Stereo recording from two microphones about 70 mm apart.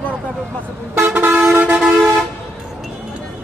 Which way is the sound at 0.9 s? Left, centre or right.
Right.